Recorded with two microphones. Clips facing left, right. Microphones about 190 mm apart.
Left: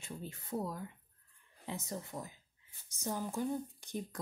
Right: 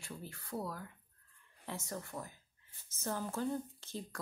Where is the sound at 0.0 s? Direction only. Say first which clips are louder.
Left 2 dB; 20° left (ahead or behind).